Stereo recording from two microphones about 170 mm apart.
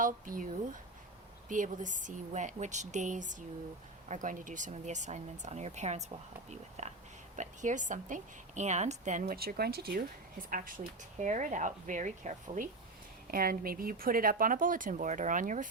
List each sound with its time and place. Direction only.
0.0 s a woman's voice: 50° right (ahead or behind)
11.2 s a woman's voice: 45° right (ahead or behind)
13.2 s speech: 60° right (ahead or behind)